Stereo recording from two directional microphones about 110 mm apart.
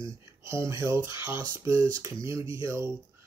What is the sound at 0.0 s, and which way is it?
A man's voice, 30° right (ahead or behind).